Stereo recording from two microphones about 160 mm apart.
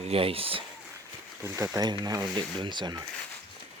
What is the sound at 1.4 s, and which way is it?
Speech, 20° right (ahead or behind).